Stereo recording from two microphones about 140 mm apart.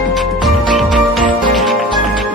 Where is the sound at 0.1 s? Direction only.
Centre (ahead or behind).